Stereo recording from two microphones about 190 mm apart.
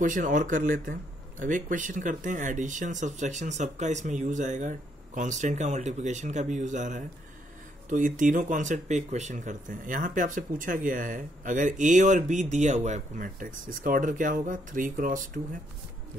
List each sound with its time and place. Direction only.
0.0 s speech: 45° right (ahead or behind)